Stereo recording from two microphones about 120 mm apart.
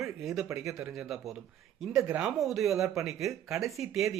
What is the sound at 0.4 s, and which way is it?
Speech, 25° right (ahead or behind).